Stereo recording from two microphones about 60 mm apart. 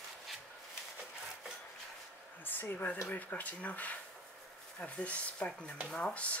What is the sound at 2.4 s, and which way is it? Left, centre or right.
Speech, left.